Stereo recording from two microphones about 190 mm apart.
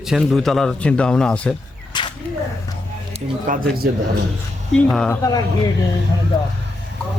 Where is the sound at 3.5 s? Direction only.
45° right (ahead or behind).